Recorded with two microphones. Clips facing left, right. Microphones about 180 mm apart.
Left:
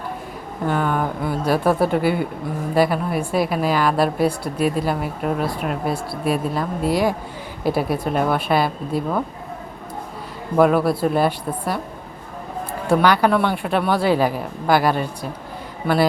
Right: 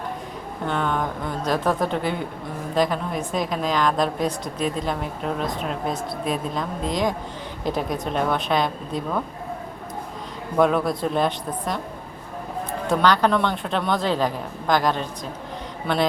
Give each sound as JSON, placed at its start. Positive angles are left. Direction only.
{"t": 0.6, "sound": "a woman's voice", "side_deg": 5}
{"t": 10.6, "sound": "speech", "side_deg": 5}
{"t": 12.9, "sound": "a woman's voice", "side_deg": 10}